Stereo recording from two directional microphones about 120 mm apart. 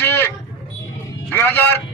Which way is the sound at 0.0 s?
20° left (ahead or behind).